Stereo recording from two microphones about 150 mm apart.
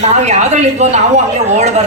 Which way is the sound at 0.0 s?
50° right (ahead or behind).